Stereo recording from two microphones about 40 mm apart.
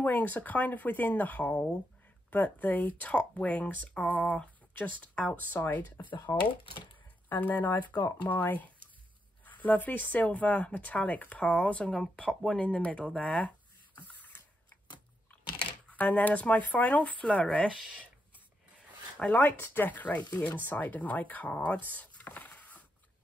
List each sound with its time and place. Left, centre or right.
0.0 s speech: left
1.5 s speech: left
2.3 s speech: left
5.3 s speech: left
14.0 s a sound: left
15.9 s speech: left
19.1 s speech: left
19.4 s speech: left